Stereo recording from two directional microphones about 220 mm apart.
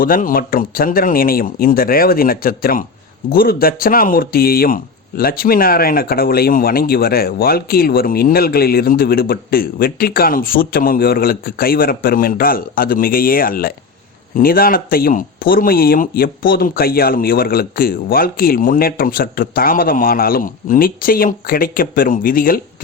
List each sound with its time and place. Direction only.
0.0 s speech: 40° left (ahead or behind)